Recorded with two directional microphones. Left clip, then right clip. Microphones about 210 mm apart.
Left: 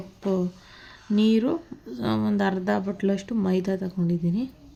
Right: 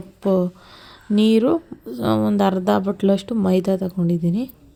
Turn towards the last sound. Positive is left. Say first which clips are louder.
# right 5 dB
turn(degrees=-25)  # may be behind; listen again after turning